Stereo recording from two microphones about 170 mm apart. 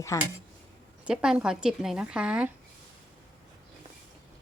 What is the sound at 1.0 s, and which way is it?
Speech, 5° right (ahead or behind).